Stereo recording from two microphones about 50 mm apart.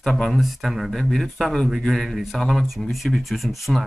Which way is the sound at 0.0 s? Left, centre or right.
Centre.